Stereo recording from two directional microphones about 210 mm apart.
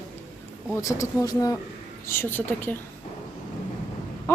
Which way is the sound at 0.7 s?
15° left (ahead or behind).